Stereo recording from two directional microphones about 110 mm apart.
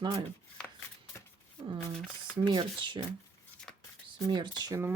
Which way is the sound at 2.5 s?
45° right (ahead or behind).